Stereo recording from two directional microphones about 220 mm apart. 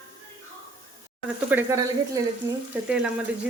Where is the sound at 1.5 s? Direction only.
10° right (ahead or behind).